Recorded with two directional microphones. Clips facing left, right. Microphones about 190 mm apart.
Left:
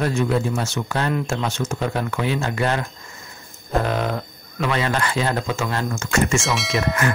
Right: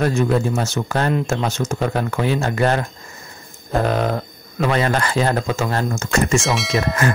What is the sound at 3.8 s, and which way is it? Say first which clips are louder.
Speech: right 3 dB; 40° right (ahead or behind).